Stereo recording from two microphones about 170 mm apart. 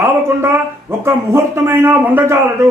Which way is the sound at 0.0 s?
15° right (ahead or behind).